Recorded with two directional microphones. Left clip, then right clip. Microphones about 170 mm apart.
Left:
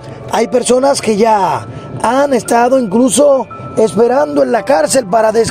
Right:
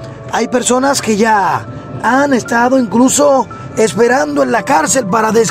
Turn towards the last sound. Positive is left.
turn(degrees=25)  # may be behind; listen again after turning